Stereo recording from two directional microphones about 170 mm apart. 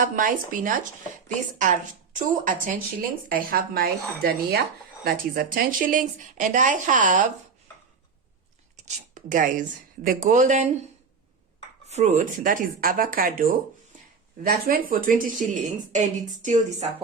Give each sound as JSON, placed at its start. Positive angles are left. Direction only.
{"t": 0.0, "sound": "speech", "side_deg": -50}
{"t": 8.7, "sound": "a woman's voice", "side_deg": -45}
{"t": 11.9, "sound": "speech", "side_deg": -40}